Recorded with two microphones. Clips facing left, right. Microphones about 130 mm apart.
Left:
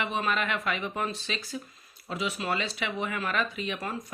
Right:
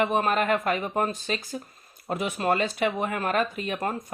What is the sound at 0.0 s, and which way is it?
Speech, 45° right (ahead or behind).